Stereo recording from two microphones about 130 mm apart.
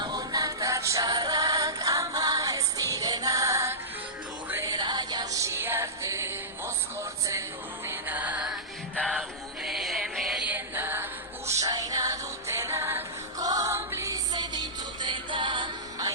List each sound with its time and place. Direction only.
0.0 s music: 30° right (ahead or behind)
7.9 s music: 15° right (ahead or behind)
9.6 s music: centre (ahead or behind)
10.5 s music: 15° right (ahead or behind)
14.3 s music: 35° right (ahead or behind)